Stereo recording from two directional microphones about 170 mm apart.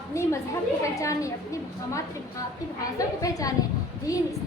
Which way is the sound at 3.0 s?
20° left (ahead or behind).